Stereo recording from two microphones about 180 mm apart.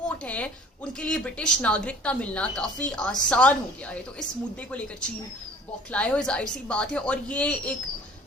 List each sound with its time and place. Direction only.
0.3 s a sound: 5° left (ahead or behind)
0.9 s speech: 5° left (ahead or behind)
4.7 s speech: 5° left (ahead or behind)